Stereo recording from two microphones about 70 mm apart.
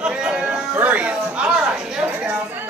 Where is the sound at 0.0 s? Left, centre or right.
Centre.